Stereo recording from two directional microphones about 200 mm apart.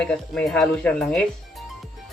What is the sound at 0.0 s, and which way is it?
Speech, 5° left (ahead or behind).